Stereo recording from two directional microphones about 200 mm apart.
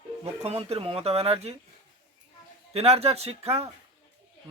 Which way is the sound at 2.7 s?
30° right (ahead or behind).